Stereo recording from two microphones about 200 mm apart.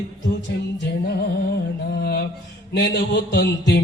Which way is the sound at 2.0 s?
50° left (ahead or behind).